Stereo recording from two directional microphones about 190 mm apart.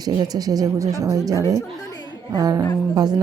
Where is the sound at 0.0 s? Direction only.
20° right (ahead or behind).